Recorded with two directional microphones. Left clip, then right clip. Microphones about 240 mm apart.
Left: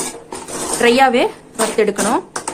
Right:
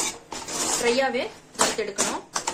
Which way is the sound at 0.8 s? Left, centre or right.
Left.